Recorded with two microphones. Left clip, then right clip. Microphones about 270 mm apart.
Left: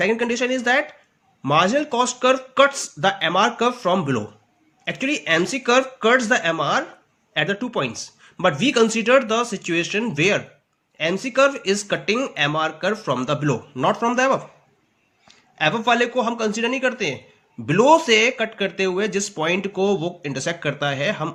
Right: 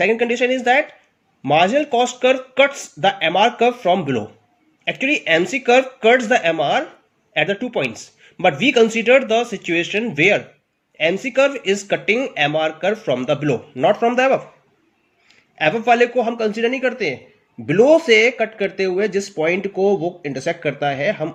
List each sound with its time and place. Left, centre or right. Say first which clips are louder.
0.0 s speech: right 4 dB; centre
15.6 s speech: right 4 dB; left